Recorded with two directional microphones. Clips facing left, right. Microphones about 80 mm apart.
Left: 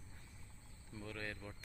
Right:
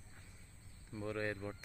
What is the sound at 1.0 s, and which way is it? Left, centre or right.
Speech, right.